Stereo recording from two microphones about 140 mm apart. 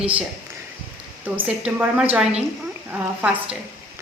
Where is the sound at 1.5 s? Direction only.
10° right (ahead or behind).